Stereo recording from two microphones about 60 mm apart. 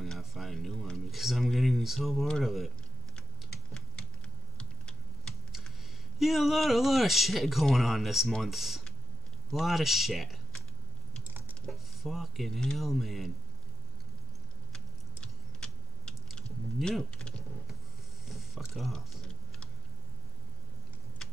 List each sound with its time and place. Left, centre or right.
0.0 s a sound: centre
1.1 s speech: centre
4.6 s typing: centre
6.1 s speech: centre
11.2 s a sound: right
11.6 s speech: centre
15.1 s a sound: centre
16.7 s speech: centre
17.1 s typing: centre
18.7 s speech: centre